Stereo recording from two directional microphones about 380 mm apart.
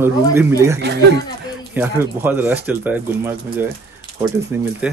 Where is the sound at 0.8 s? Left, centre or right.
Right.